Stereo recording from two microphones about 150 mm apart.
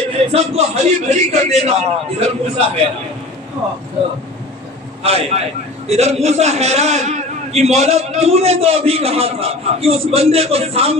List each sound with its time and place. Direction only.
0.3 s a man's voice: 45° right (ahead or behind)
5.0 s a man's voice: 45° right (ahead or behind)